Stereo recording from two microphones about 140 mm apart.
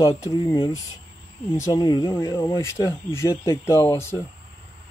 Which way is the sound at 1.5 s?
25° left (ahead or behind).